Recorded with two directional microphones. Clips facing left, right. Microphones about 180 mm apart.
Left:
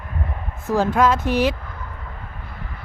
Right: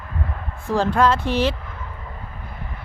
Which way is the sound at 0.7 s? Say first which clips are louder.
Left 1 dB; 10° left (ahead or behind).